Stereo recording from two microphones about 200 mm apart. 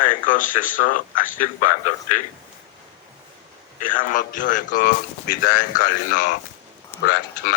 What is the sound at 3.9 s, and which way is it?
A man's voice, 40° left (ahead or behind).